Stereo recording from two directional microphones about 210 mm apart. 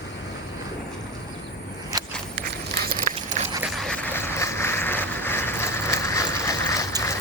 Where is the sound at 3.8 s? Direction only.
5° left (ahead or behind).